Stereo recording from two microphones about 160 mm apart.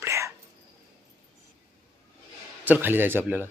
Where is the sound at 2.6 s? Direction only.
10° right (ahead or behind).